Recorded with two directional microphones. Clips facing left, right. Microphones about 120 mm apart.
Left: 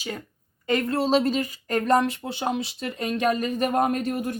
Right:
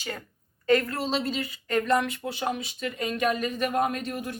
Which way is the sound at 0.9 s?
40° left (ahead or behind).